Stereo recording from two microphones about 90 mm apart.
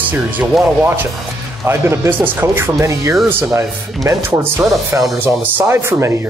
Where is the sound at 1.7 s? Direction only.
25° right (ahead or behind).